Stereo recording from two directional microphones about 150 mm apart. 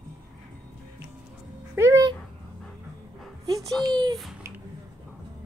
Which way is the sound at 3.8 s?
25° right (ahead or behind).